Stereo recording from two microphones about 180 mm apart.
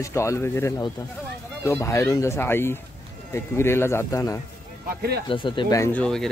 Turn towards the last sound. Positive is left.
turn(degrees=5)  # may be behind; listen again after turning